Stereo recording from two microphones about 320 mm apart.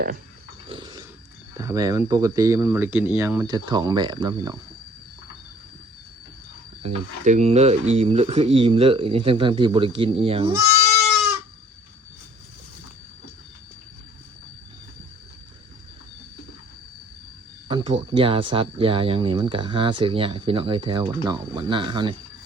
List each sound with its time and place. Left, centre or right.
0.7 s dog: centre
1.5 s speech: centre
6.8 s speech: right
10.7 s goat: right
17.7 s speech: centre